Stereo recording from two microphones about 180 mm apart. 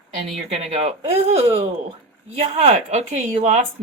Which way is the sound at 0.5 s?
35° right (ahead or behind).